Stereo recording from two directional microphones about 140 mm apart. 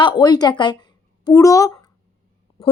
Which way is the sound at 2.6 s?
40° left (ahead or behind).